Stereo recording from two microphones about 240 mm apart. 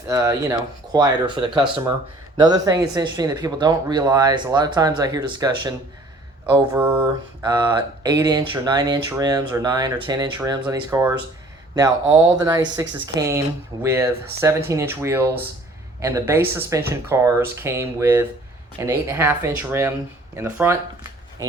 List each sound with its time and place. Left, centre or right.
0.1 s speech: centre
6.7 s speech: centre
7.4 s speech: centre